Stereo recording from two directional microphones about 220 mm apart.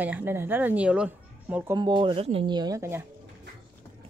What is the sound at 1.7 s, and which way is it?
Speech, 20° right (ahead or behind).